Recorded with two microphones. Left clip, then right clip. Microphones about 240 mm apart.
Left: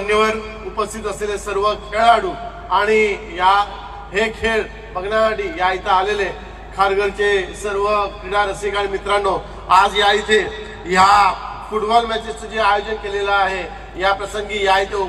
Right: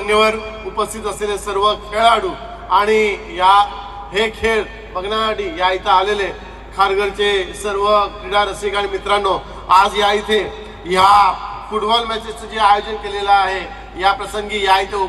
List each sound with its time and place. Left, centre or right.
0.0 s a man's voice: right
11.7 s a man's voice: right